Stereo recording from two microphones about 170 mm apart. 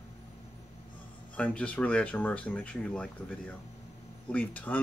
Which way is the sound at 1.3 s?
5° left (ahead or behind).